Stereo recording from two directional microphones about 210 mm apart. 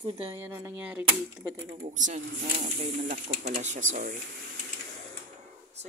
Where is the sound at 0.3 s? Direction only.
10° right (ahead or behind).